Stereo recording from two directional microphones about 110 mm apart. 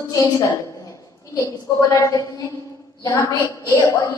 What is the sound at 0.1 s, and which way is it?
A woman's voice, 30° left (ahead or behind).